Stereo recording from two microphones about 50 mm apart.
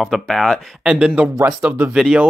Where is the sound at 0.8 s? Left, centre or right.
Centre.